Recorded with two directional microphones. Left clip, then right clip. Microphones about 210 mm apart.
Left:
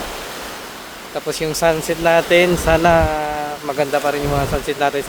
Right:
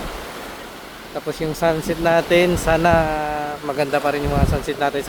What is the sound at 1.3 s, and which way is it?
Speech, 20° left (ahead or behind).